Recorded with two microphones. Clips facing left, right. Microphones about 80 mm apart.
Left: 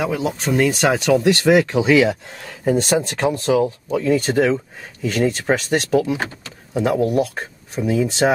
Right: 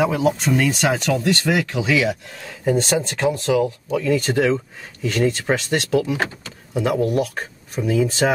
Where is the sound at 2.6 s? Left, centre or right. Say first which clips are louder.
Left 2 dB; centre.